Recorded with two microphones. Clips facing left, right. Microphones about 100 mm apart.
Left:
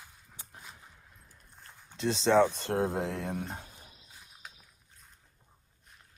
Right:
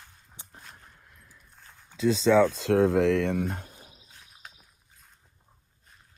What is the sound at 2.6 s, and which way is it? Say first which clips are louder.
Speech: right 8 dB; 90° right.